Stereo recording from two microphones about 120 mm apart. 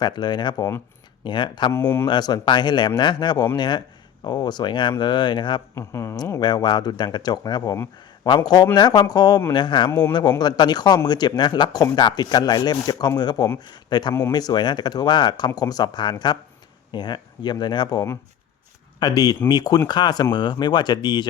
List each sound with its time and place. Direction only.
0.0 s a man's voice: 40° left (ahead or behind)
1.7 s speech: 20° left (ahead or behind)
2.0 s a man's voice: 35° left (ahead or behind)
5.7 s speech: 25° left (ahead or behind)
6.4 s a man's voice: 35° left (ahead or behind)
14.1 s speech: 25° left (ahead or behind)
14.3 s a man's voice: 35° left (ahead or behind)